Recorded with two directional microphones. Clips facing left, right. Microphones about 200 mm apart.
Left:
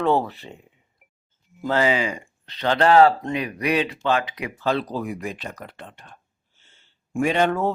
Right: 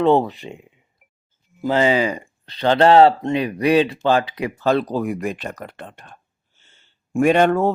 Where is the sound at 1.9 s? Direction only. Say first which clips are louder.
Right 4 dB; 40° right (ahead or behind).